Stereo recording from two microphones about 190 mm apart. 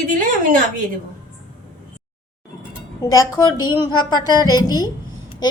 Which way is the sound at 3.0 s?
15° left (ahead or behind).